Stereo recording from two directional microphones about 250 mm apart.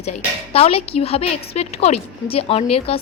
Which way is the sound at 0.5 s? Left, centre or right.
Left.